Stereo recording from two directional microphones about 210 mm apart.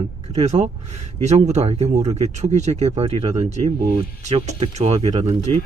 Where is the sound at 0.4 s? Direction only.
35° right (ahead or behind).